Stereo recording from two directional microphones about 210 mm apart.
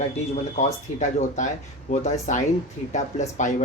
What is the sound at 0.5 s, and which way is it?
Speech, 35° left (ahead or behind).